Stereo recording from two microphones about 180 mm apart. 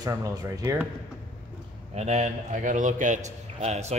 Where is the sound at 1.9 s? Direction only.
40° right (ahead or behind).